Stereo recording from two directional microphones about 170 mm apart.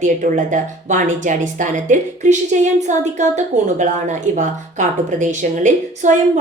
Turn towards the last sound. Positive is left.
turn(degrees=-45)  # may be behind; listen again after turning